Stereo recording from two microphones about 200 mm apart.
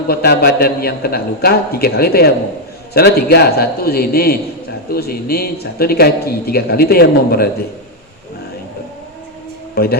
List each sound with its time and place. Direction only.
0.1 s a man's voice: 50° left (ahead or behind)
9.7 s a man's voice: 50° left (ahead or behind)